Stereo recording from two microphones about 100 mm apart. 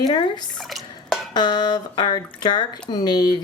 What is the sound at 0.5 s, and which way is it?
Drip, centre (ahead or behind).